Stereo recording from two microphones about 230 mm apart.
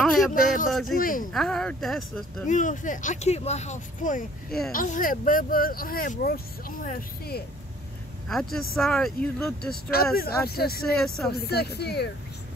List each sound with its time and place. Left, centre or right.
0.0 s speech: centre
0.3 s speech: left
1.3 s speech: centre
2.4 s speech: left
8.3 s speech: centre
10.1 s speech: left